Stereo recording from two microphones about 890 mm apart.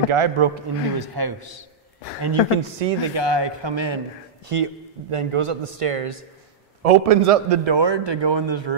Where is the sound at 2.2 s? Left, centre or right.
Right.